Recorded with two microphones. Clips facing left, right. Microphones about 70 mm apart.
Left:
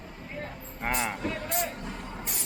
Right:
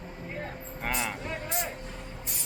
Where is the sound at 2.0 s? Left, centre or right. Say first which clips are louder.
Left 4 dB; left.